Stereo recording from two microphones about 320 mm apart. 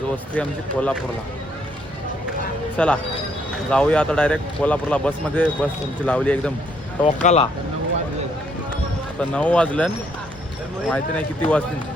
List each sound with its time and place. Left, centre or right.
0.3 s speech: centre
2.7 s speech: centre
7.0 s speech: left
9.1 s speech: centre